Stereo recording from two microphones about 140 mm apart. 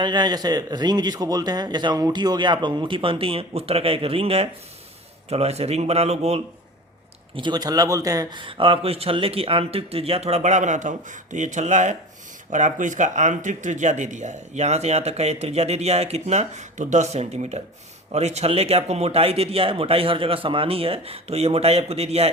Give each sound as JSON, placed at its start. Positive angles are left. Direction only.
{"t": 0.0, "sound": "a man's voice", "side_deg": -30}
{"t": 7.3, "sound": "a man's voice", "side_deg": -30}